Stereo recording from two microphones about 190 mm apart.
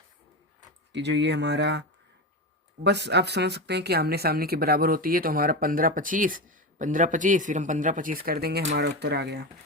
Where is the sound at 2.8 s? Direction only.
65° right (ahead or behind).